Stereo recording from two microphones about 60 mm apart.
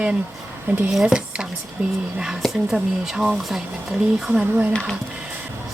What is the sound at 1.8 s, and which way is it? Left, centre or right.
Speech, right.